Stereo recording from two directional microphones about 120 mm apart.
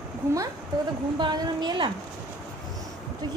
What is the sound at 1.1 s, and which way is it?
Speech, 40° right (ahead or behind).